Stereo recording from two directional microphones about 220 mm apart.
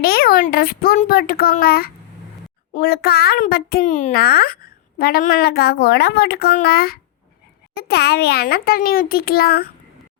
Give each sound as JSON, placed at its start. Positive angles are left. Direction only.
{"t": 0.0, "sound": "a child's voice", "side_deg": 45}